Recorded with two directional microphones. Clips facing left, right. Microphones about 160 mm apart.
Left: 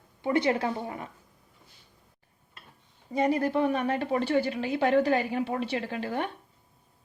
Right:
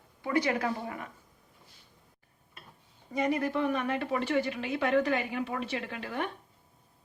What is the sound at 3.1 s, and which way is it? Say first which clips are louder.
A woman's voice: left 4 dB; 30° left (ahead or behind).